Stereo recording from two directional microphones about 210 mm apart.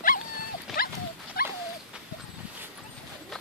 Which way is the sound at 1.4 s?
45° left (ahead or behind).